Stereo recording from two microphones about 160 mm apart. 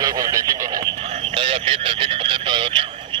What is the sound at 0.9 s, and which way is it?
Radio, 40° right (ahead or behind).